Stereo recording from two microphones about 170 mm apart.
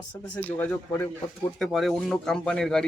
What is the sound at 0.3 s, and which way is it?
Speech, 10° left (ahead or behind).